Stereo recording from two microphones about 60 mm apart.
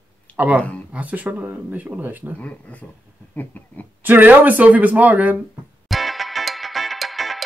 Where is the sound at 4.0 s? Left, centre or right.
Right.